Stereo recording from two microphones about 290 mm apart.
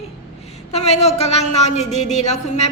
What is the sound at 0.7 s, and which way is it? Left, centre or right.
A woman's voice, left.